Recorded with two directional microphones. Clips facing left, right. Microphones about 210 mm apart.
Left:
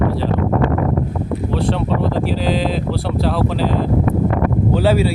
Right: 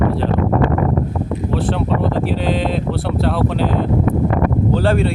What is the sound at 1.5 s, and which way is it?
Speech, centre (ahead or behind).